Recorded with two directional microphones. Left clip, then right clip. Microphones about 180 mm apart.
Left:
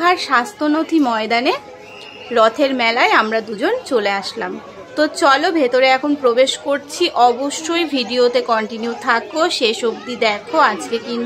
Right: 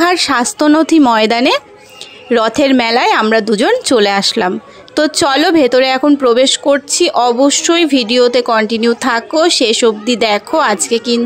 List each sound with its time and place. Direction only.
0.0 s a woman's voice: 40° right (ahead or behind)